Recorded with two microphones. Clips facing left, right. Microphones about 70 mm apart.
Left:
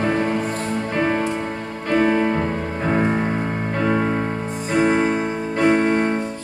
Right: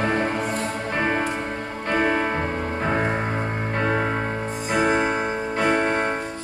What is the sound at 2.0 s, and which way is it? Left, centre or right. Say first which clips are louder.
Music: left 4 dB; centre.